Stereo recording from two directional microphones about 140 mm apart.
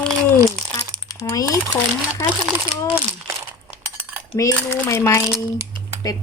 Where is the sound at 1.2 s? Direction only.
25° left (ahead or behind).